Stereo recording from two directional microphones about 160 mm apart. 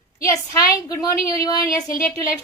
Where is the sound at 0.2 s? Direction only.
20° left (ahead or behind).